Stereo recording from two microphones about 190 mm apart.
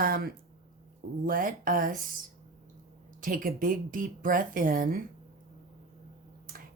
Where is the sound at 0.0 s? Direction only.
50° right (ahead or behind).